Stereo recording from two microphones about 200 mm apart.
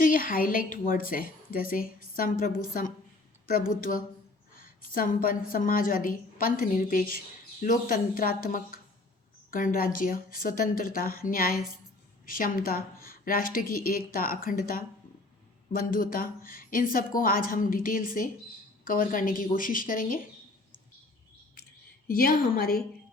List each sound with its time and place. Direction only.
0.0 s speech: 45° left (ahead or behind)
3.9 s speech: 45° left (ahead or behind)
22.0 s speech: 45° left (ahead or behind)